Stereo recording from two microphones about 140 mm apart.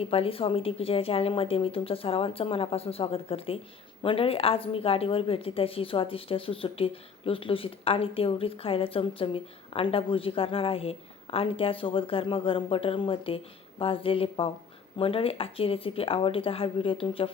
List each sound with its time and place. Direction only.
0.0 s a woman's voice: 45° left (ahead or behind)